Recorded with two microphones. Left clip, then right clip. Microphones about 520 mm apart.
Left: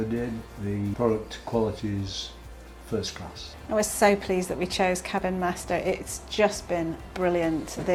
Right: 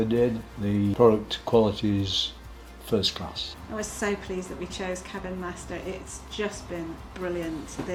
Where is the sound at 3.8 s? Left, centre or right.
Left.